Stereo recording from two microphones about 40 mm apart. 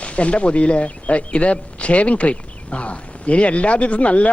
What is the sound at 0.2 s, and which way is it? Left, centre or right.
Speech, left.